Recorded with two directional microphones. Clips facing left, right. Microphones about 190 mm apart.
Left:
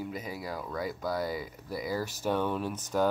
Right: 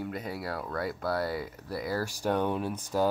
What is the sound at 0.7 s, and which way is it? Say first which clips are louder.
Speech: right 1 dB; 60° right (ahead or behind).